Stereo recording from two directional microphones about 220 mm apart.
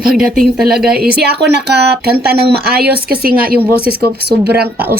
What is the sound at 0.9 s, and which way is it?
A woman's voice, 45° right (ahead or behind).